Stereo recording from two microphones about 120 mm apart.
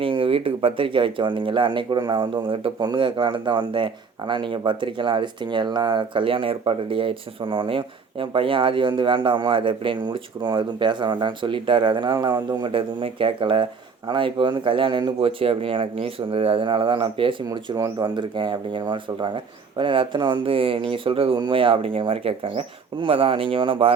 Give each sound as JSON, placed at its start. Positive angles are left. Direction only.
{"t": 0.0, "sound": "speech", "side_deg": -50}